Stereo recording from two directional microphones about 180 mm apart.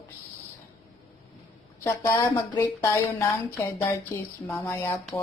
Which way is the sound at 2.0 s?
15° left (ahead or behind).